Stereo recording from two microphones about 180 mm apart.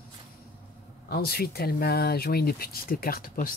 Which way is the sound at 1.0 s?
60° left (ahead or behind).